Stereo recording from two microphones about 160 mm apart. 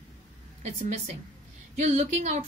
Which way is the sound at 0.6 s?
45° right (ahead or behind).